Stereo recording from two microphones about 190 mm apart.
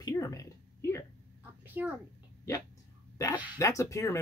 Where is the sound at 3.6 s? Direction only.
15° left (ahead or behind).